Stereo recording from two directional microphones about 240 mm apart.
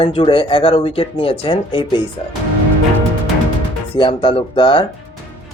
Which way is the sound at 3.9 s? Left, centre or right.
Centre.